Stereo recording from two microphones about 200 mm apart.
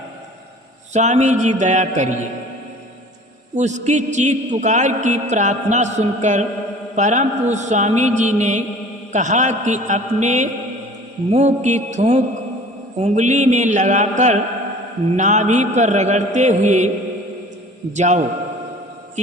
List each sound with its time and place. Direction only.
0.9 s a man's voice: 35° right (ahead or behind)
3.5 s a man's voice: 35° right (ahead or behind)
17.9 s a man's voice: 35° right (ahead or behind)